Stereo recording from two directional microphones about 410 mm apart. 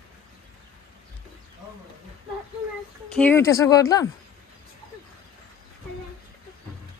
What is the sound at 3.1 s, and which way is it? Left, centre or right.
Speech, centre.